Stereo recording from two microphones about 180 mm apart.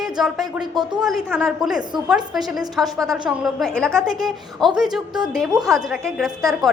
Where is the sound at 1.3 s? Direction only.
Centre (ahead or behind).